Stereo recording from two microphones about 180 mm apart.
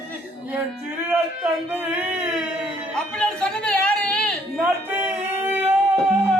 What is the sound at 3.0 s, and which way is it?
Speech, 5° left (ahead or behind).